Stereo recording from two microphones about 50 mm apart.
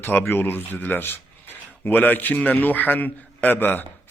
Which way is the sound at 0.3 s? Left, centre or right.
Left.